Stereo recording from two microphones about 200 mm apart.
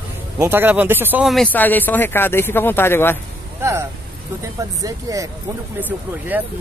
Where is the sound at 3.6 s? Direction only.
15° right (ahead or behind).